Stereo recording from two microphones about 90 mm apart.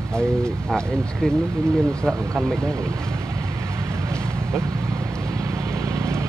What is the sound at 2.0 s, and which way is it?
Speech, 25° right (ahead or behind).